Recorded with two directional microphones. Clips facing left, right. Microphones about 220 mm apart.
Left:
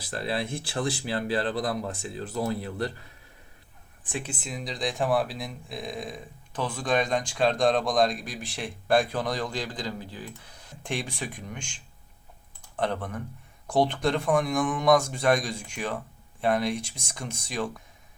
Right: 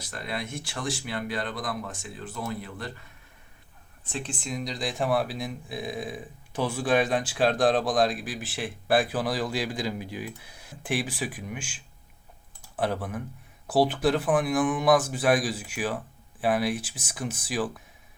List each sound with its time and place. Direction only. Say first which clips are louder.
0.0 s speech: left 4 dB; 35° left (ahead or behind)
4.0 s speech: even; 10° left (ahead or behind); by 17.8 s 5° right (ahead or behind)